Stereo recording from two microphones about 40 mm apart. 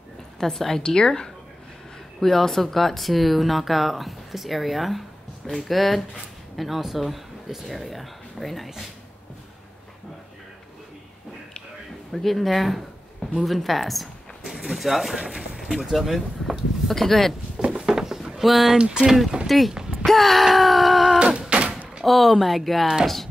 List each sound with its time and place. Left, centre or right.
0.4 s a woman's voice: centre
2.1 s speech: centre
12.1 s speech: centre
16.9 s a woman's voice: centre
17.6 s a sound: right
18.3 s speech: centre
19.7 s a sound: centre
20.1 s speech: centre
21.4 s door: right
22.0 s speech: centre